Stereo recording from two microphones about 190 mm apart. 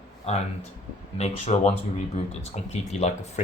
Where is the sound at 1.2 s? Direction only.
35° left (ahead or behind).